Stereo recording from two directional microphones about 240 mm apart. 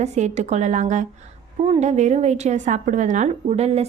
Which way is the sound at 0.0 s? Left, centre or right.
Right.